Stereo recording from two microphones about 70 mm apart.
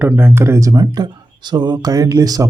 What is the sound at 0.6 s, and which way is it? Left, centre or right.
Speech, right.